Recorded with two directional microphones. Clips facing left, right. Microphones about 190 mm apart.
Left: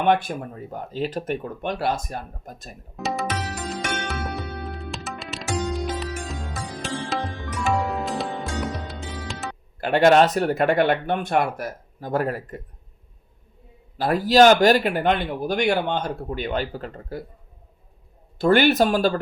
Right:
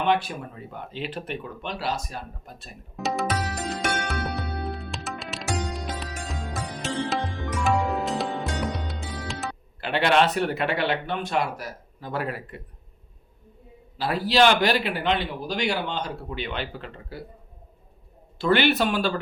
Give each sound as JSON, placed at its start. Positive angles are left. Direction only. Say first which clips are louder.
{"t": 0.0, "sound": "speech", "louder": "left 3 dB", "side_deg": 50}
{"t": 2.9, "sound": "music", "louder": "even", "side_deg": 0}
{"t": 9.8, "sound": "speech", "louder": "left 5 dB", "side_deg": 45}
{"t": 14.0, "sound": "speech", "louder": "left 5 dB", "side_deg": 45}
{"t": 18.3, "sound": "speech", "louder": "left 4 dB", "side_deg": 45}